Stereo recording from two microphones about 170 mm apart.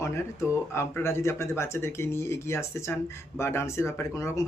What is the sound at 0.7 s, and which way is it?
Speech, 15° left (ahead or behind).